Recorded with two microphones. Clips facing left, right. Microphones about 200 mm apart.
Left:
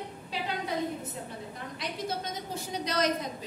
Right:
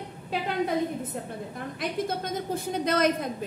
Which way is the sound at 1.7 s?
50° right (ahead or behind).